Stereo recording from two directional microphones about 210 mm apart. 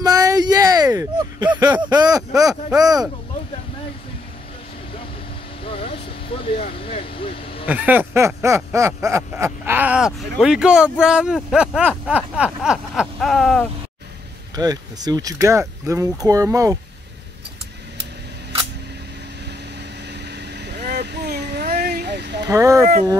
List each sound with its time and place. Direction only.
0.0 s a sound: 15° right (ahead or behind)
2.8 s speech: 15° right (ahead or behind)
5.6 s speech: 25° left (ahead or behind)
7.6 s a sound: 10° right (ahead or behind)
14.5 s speech: 20° right (ahead or behind)
20.1 s vehicle: 55° right (ahead or behind)
22.5 s speech: 15° right (ahead or behind)